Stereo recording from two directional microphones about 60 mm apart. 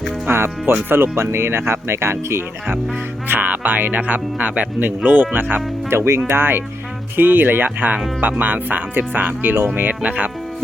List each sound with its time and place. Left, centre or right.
0.3 s speech: right
3.2 s speech: right
5.9 s speech: right